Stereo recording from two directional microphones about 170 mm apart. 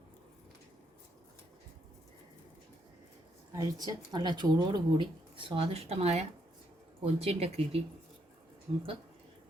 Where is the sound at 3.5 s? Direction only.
25° right (ahead or behind).